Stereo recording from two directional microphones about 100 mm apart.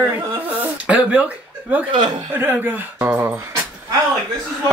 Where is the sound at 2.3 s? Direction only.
20° right (ahead or behind).